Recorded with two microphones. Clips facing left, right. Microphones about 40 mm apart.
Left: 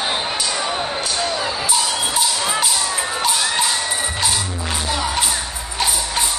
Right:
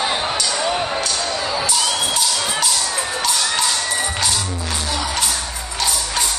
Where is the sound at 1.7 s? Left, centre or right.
Centre.